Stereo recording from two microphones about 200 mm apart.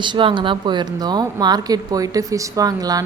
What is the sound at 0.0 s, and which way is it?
Speech, 25° right (ahead or behind).